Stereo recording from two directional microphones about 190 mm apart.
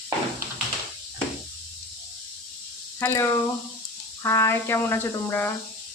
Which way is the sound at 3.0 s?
15° left (ahead or behind).